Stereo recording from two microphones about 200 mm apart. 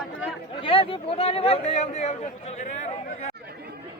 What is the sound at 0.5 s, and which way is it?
A man's voice, 25° left (ahead or behind).